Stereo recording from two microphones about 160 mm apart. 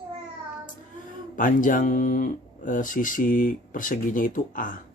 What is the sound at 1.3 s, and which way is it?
Speech, 55° left (ahead or behind).